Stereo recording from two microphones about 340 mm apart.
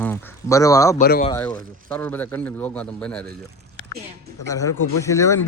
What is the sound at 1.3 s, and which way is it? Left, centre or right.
A man's voice, centre.